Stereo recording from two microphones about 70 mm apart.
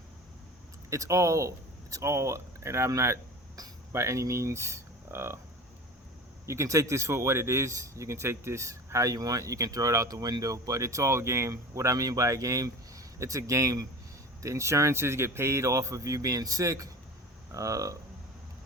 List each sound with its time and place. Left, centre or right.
0.9 s speech: right
6.4 s speech: right